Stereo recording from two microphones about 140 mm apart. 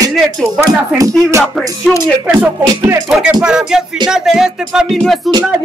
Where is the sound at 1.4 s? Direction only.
5° left (ahead or behind).